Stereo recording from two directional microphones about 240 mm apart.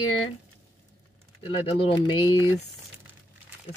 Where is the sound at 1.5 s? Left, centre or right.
Left.